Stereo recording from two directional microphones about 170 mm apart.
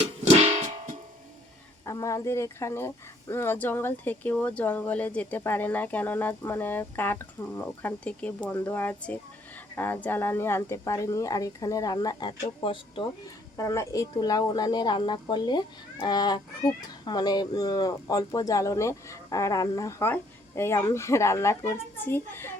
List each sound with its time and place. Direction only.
0.0 s music: 40° right (ahead or behind)
1.8 s speech: 20° left (ahead or behind)
13.6 s speech: 20° left (ahead or behind)